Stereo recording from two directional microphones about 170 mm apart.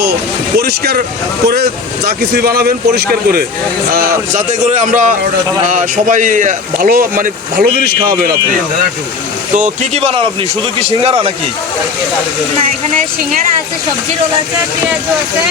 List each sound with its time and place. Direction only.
0.5 s speech: 70° right (ahead or behind)
3.9 s a man's voice: 55° right (ahead or behind)
9.6 s speech: 40° right (ahead or behind)